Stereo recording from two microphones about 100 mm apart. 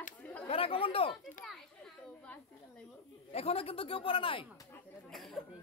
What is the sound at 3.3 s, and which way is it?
Speech, 90° left.